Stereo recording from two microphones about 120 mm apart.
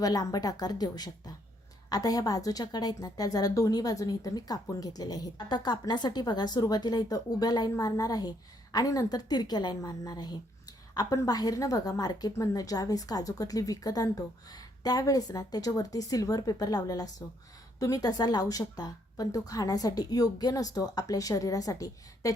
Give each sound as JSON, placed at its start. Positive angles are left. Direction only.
{"t": 0.0, "sound": "a woman's voice", "side_deg": 30}